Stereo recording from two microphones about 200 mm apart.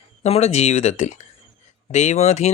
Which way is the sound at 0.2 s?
35° left (ahead or behind).